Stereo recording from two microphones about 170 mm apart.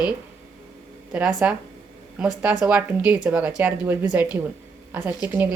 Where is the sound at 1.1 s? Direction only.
5° right (ahead or behind).